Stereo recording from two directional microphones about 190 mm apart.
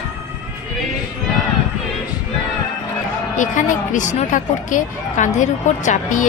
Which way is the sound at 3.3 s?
40° left (ahead or behind).